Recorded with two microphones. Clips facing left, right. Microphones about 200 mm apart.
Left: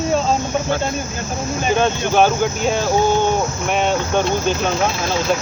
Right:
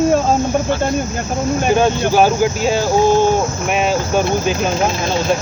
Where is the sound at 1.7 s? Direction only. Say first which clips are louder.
Right 2 dB; 5° right (ahead or behind).